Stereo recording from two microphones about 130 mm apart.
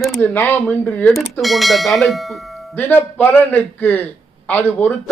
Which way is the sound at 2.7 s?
15° left (ahead or behind).